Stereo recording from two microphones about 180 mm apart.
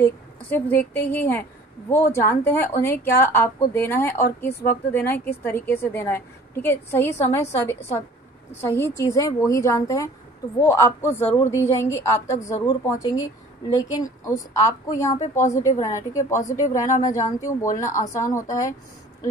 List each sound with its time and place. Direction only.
0.0 s a woman's voice: 10° left (ahead or behind)
8.5 s a woman's voice: 15° left (ahead or behind)
15.0 s speech: 40° left (ahead or behind)
15.4 s a woman's voice: 15° left (ahead or behind)
16.4 s speech: 45° left (ahead or behind)
17.0 s a woman's voice: 15° left (ahead or behind)
17.7 s speech: 45° left (ahead or behind)
18.1 s a woman's voice: 15° left (ahead or behind)